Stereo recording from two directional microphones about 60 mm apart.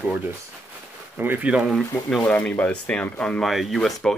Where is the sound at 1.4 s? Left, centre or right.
Centre.